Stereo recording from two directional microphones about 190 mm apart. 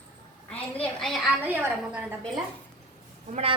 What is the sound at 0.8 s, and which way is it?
A woman's voice, centre (ahead or behind).